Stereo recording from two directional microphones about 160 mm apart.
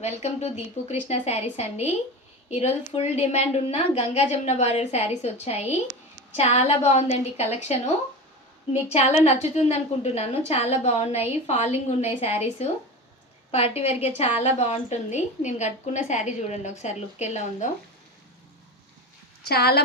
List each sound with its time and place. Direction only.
0.0 s a woman's voice: 40° left (ahead or behind)
19.5 s a woman's voice: 75° left (ahead or behind)